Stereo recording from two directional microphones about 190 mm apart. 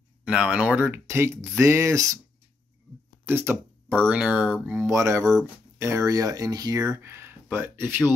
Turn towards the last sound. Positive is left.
turn(degrees=-10)  # may be behind; listen again after turning